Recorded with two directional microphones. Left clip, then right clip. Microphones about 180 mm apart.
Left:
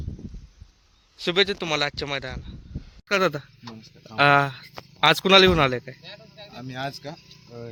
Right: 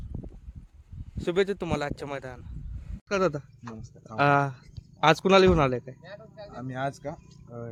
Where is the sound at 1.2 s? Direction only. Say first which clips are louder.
Left 4 dB; 5° right (ahead or behind).